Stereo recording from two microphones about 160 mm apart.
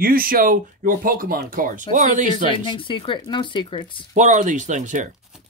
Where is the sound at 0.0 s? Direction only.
65° right (ahead or behind).